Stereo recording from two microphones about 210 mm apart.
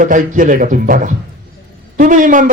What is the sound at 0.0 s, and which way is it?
Speech, 40° right (ahead or behind).